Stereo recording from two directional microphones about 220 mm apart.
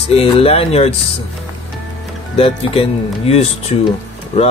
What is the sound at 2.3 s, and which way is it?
Music, 25° left (ahead or behind).